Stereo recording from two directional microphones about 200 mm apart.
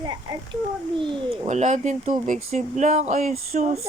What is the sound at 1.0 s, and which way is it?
Child singing, 35° right (ahead or behind).